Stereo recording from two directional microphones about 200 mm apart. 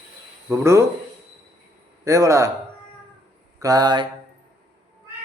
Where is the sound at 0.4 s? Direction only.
15° right (ahead or behind).